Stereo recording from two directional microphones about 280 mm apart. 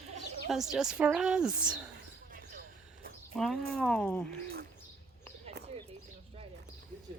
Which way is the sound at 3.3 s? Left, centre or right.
Centre.